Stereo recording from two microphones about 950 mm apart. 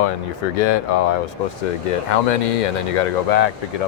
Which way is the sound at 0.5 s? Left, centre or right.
Left.